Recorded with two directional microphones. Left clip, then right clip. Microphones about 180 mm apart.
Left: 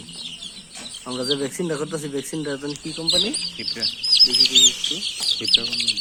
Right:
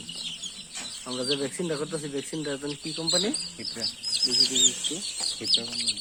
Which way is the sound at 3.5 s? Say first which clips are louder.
Left 7 dB; 20° right (ahead or behind).